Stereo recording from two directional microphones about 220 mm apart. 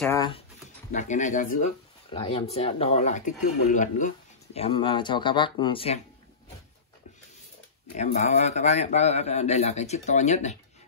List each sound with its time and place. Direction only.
0.0 s speech: 15° left (ahead or behind)
0.9 s a man's voice: 35° left (ahead or behind)
4.6 s a man's voice: 25° left (ahead or behind)
7.9 s a man's voice: 30° left (ahead or behind)